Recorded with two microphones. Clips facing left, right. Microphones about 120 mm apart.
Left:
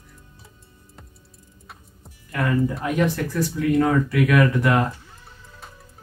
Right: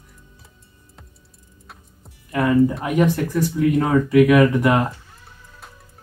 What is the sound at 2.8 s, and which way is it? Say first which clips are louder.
Speech: right 3 dB; 15° right (ahead or behind).